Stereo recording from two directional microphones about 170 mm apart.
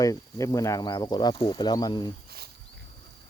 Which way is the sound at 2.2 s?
65° right (ahead or behind).